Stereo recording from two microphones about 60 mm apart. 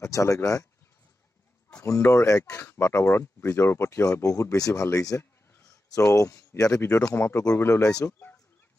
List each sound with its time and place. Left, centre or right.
0.0 s speech: left
1.8 s speech: left
4.0 s speech: left
5.0 s speech: left
7.2 s speech: left